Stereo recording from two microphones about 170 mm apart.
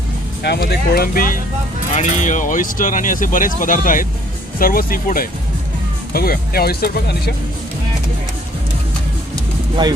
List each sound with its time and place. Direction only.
0.4 s speech: 75° left (ahead or behind); by 1.4 s 60° left (ahead or behind)
2.0 s speech: 45° left (ahead or behind); by 7.3 s 70° left (ahead or behind)